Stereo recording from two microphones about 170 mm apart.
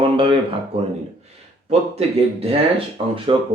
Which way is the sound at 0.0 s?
30° right (ahead or behind).